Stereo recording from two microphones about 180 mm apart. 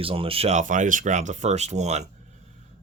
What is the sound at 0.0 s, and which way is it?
Speech, 30° right (ahead or behind).